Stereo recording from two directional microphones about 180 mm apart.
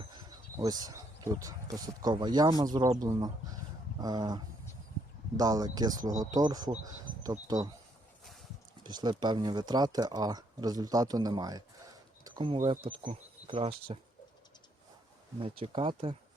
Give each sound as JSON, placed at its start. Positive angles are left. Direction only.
{"t": 0.1, "sound": "speech", "side_deg": -20}
{"t": 8.2, "sound": "clip-clop", "side_deg": 0}
{"t": 8.8, "sound": "speech", "side_deg": -25}
{"t": 12.2, "sound": "a sound", "side_deg": -30}
{"t": 12.7, "sound": "speech", "side_deg": -30}
{"t": 15.4, "sound": "speech", "side_deg": -30}